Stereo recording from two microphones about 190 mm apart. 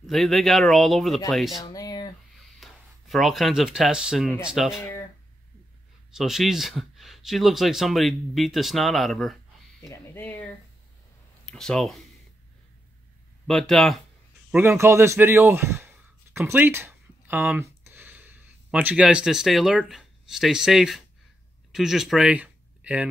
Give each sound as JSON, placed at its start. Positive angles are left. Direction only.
{"t": 0.0, "sound": "speech", "side_deg": 0}
{"t": 1.6, "sound": "a sound", "side_deg": 20}
{"t": 2.6, "sound": "speech", "side_deg": 0}
{"t": 6.1, "sound": "speech", "side_deg": 0}
{"t": 13.5, "sound": "speech", "side_deg": 0}
{"t": 14.5, "sound": "a man's voice", "side_deg": -10}